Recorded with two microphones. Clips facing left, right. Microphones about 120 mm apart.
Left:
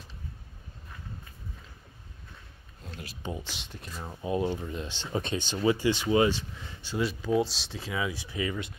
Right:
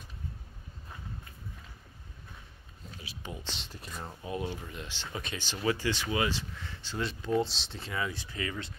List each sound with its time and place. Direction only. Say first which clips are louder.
3.2 s speech: left 6 dB; 25° left (ahead or behind)
3.5 s speech: left 1 dB; centre (ahead or behind)
4.2 s speech: left 8 dB; 25° left (ahead or behind)